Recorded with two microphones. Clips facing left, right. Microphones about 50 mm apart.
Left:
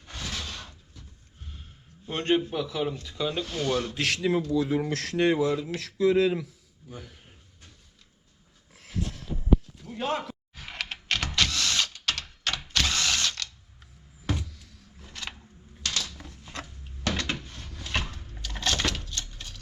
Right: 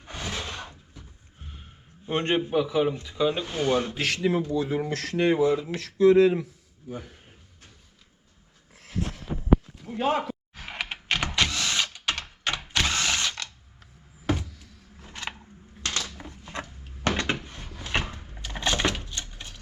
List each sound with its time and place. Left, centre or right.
0.0 s a sound: right
2.0 s speech: right
3.9 s speech: centre
6.0 s speech: right
6.4 s speech: right
9.8 s power windows: centre
14.3 s vehicle: centre
15.1 s a sound: right
17.0 s door: right
17.7 s a sound: centre